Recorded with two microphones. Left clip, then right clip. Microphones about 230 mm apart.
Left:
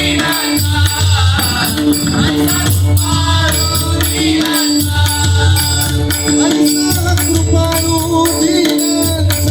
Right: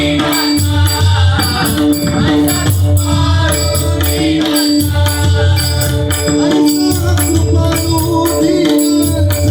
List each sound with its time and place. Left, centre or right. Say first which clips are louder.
6.2 s music: right 1 dB; left